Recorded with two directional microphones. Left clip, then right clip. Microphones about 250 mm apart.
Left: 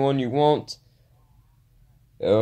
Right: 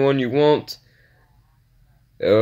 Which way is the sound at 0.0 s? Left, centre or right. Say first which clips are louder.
Right 4 dB; right.